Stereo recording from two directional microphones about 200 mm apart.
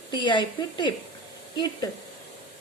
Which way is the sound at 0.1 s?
25° left (ahead or behind).